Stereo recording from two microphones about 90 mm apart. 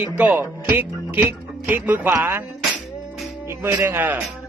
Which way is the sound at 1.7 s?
20° right (ahead or behind).